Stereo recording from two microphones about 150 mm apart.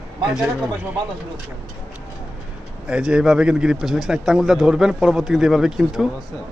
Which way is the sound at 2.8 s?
5° right (ahead or behind).